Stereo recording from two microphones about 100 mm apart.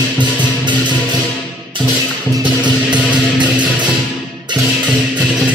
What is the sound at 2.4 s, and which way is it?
Music, 50° right (ahead or behind).